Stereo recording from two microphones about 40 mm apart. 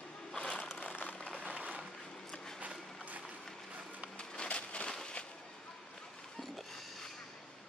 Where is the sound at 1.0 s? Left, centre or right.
Left.